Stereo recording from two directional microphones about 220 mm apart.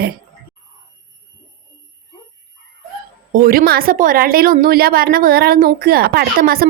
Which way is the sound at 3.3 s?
40° right (ahead or behind).